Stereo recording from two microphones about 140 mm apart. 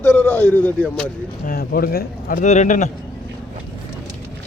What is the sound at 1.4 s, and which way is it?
Speech, 90° left.